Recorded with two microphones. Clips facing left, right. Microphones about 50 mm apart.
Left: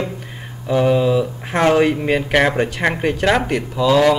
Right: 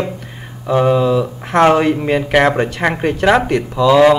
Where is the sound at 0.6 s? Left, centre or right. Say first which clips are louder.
Right 2 dB; right.